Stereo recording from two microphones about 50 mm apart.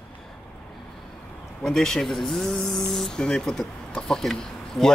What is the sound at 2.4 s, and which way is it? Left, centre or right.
Speech, centre.